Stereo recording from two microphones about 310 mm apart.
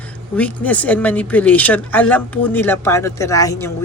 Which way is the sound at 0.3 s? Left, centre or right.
Centre.